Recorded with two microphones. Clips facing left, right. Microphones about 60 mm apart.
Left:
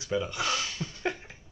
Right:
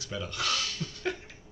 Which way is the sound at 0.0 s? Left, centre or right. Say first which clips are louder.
Left 4 dB; centre.